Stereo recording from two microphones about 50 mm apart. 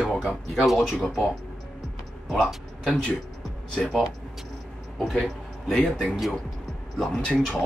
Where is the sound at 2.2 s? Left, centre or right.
Centre.